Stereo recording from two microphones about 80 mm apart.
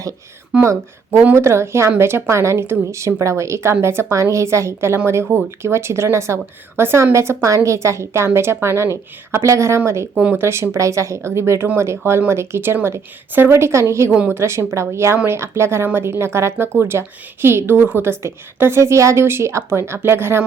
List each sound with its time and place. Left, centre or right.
0.6 s a woman's voice: right
14.1 s a woman's voice: centre
14.3 s a woman's voice: right